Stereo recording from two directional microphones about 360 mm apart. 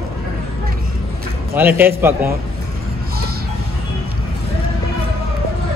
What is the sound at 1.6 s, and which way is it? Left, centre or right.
Speech, centre.